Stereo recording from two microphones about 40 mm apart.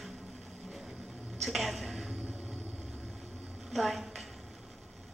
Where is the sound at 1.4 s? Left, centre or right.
Centre.